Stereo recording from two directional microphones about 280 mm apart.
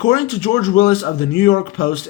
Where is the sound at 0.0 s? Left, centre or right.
Left.